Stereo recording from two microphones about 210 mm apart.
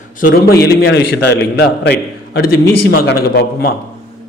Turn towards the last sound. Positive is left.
turn(degrees=50)  # may be behind; listen again after turning